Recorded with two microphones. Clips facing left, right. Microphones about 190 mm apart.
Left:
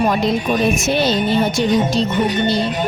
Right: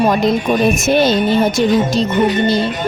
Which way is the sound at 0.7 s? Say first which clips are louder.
Right 4 dB; 45° right (ahead or behind).